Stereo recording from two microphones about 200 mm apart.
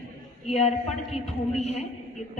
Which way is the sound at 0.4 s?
30° left (ahead or behind).